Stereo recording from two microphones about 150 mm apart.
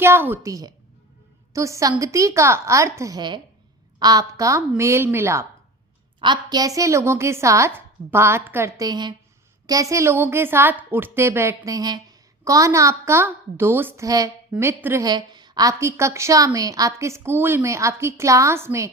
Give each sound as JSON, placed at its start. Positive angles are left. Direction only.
{"t": 0.0, "sound": "a woman's voice", "side_deg": -15}
{"t": 6.1, "sound": "a woman's voice", "side_deg": -30}
{"t": 15.0, "sound": "a woman's voice", "side_deg": -30}